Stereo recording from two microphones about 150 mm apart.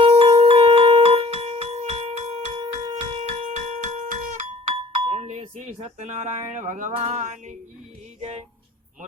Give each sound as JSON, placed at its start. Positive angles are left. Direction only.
{"t": 0.0, "sound": "music", "side_deg": -40}
{"t": 5.0, "sound": "a sound", "side_deg": -45}
{"t": 6.9, "sound": "music", "side_deg": -50}